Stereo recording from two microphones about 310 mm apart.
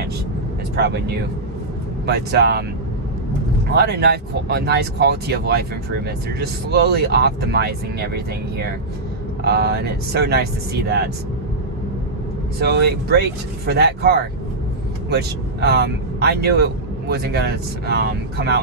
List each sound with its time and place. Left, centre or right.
0.7 s speech: right
3.7 s speech: right
9.4 s speech: right
12.5 s speech: right